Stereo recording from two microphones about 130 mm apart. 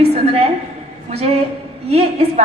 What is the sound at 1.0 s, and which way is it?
Speech, 55° right (ahead or behind).